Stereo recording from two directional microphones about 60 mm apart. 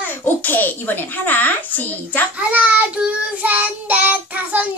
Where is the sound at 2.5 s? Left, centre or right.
Right.